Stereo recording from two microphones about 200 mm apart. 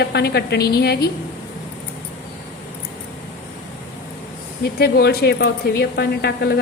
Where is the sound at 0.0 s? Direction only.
55° left (ahead or behind).